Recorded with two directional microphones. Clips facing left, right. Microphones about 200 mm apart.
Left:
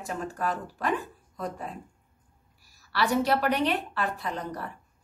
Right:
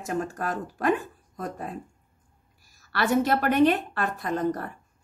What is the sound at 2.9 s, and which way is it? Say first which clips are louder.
A woman's voice: right 2 dB; 50° right (ahead or behind).